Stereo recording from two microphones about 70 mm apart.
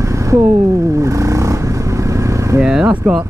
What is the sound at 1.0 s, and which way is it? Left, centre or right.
Vehicle, right.